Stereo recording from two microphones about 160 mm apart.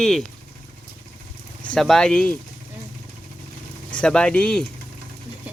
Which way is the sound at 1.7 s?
5° left (ahead or behind).